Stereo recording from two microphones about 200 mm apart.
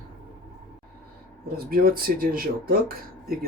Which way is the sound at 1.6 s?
45° right (ahead or behind).